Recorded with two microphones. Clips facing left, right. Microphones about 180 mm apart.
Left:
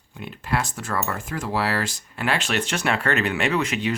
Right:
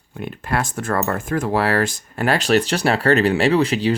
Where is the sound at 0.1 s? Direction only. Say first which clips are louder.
Right 3 dB; 50° right (ahead or behind).